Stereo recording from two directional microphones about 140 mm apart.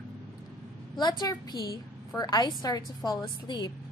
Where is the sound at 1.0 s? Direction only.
30° left (ahead or behind).